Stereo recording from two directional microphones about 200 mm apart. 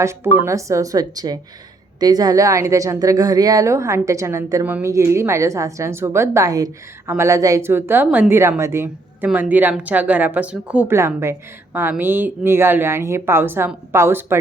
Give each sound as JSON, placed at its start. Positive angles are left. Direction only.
{"t": 0.0, "sound": "a woman's voice", "side_deg": -15}